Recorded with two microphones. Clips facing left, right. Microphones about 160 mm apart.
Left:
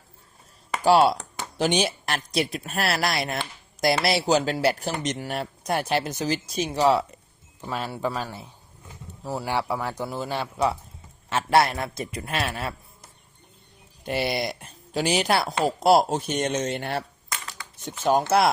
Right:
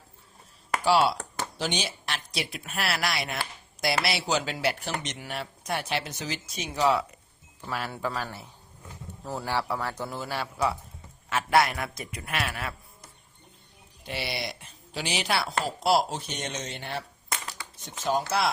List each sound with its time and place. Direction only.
0.9 s speech: 45° left (ahead or behind)
7.6 s a man's voice: 20° left (ahead or behind)
14.0 s speech: 50° left (ahead or behind)